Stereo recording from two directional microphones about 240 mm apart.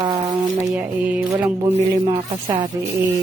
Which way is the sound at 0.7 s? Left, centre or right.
Centre.